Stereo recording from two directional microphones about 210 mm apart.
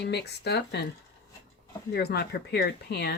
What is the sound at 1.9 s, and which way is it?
Speech, 50° left (ahead or behind).